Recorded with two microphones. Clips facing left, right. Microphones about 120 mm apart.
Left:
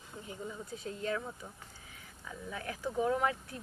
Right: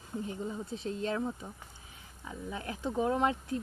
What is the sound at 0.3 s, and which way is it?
Speech, 25° right (ahead or behind).